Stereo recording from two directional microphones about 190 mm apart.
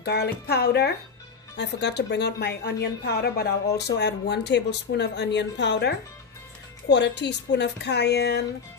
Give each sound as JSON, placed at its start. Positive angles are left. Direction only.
{"t": 0.0, "sound": "a woman's voice", "side_deg": 60}